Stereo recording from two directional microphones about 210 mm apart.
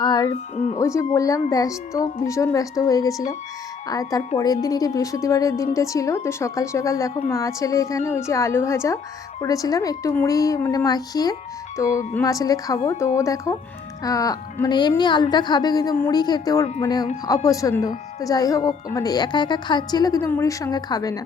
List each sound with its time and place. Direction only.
0.0 s music: 20° left (ahead or behind)
0.5 s speech: 35° left (ahead or behind)
0.8 s speech: 15° left (ahead or behind)